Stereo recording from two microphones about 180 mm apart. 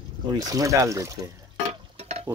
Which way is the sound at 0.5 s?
20° right (ahead or behind).